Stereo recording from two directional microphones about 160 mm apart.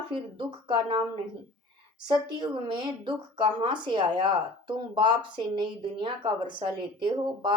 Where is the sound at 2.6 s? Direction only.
30° right (ahead or behind).